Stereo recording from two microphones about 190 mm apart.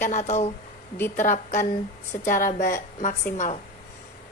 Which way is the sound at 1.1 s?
40° left (ahead or behind).